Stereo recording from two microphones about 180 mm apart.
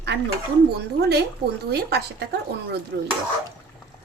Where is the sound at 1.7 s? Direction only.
65° right (ahead or behind).